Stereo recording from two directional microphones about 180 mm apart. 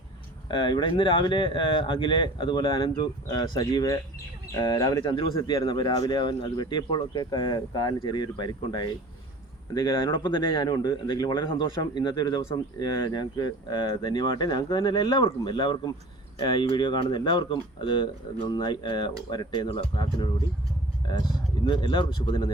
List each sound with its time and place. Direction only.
0.4 s speech: 25° left (ahead or behind)
21.7 s speech: 25° left (ahead or behind)